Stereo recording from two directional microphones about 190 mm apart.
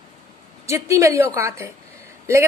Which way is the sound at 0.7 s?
15° right (ahead or behind).